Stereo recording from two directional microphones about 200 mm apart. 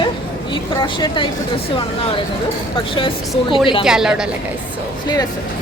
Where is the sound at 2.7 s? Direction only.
25° left (ahead or behind).